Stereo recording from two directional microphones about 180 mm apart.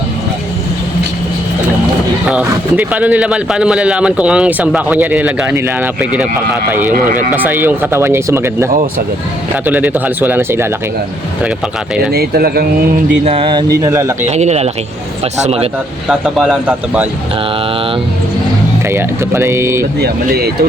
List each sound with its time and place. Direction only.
2.3 s a man's voice: 10° right (ahead or behind)
12.1 s speech: 60° right (ahead or behind)
13.2 s speech: 30° right (ahead or behind)
13.7 s a man's voice: 15° right (ahead or behind)
14.3 s speech: 40° right (ahead or behind)
16.0 s speech: 5° right (ahead or behind)
18.9 s a man's voice: 15° right (ahead or behind)
20.0 s speech: 60° right (ahead or behind)